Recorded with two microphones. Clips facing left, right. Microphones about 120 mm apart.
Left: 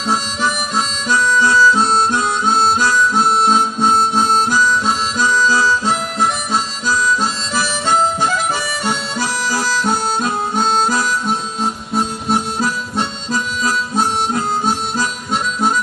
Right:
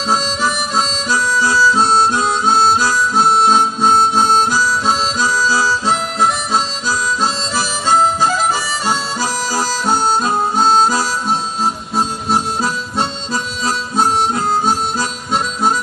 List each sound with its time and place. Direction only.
0.1 s harmonica: 40° right (ahead or behind)
9.3 s harmonica: 60° left (ahead or behind)
10.6 s harmonica: 35° right (ahead or behind)
13.3 s harmonica: 40° right (ahead or behind)